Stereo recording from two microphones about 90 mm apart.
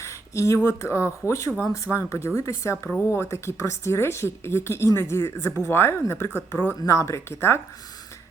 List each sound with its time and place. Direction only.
0.0 s a woman's voice: 35° left (ahead or behind)